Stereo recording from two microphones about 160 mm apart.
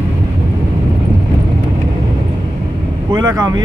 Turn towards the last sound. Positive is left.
turn(degrees=-25)  # may be behind; listen again after turning